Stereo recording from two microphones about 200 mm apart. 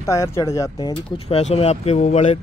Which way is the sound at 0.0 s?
15° left (ahead or behind).